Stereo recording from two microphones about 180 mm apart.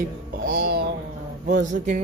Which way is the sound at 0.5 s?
60° right (ahead or behind).